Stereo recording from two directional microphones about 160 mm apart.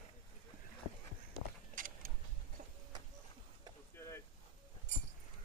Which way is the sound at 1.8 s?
55° right (ahead or behind).